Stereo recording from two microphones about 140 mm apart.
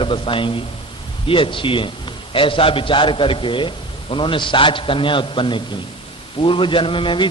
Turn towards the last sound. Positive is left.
turn(degrees=35)  # may be behind; listen again after turning